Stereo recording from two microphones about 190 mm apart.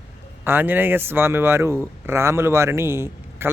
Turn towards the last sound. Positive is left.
turn(degrees=-10)  # may be behind; listen again after turning